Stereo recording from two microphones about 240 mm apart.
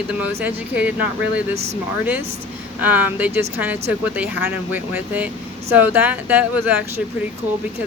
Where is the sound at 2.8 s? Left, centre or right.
Centre.